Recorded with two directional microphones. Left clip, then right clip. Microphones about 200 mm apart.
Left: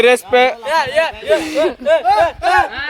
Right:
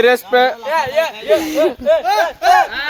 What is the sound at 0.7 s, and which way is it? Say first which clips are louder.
Speech: left 1 dB; 50° left (ahead or behind).